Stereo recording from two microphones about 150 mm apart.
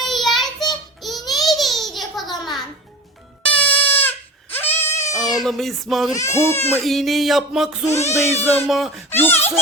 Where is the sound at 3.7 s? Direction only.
40° left (ahead or behind).